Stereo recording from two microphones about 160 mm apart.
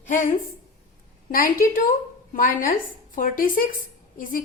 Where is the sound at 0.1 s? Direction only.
50° left (ahead or behind).